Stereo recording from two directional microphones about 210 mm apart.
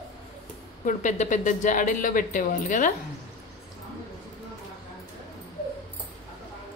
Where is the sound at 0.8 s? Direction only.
35° left (ahead or behind).